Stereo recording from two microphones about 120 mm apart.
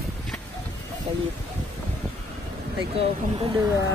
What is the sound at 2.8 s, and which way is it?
Speech, 55° right (ahead or behind).